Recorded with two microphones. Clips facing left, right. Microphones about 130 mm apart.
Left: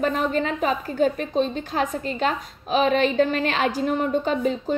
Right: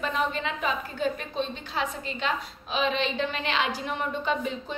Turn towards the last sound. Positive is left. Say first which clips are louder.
# left 6 dB
turn(degrees=45)  # may be behind; listen again after turning